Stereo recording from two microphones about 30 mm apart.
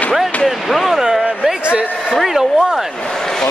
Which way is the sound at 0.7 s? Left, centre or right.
Centre.